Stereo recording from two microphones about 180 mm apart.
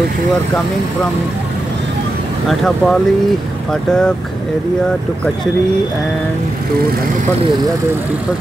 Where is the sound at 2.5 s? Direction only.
Centre (ahead or behind).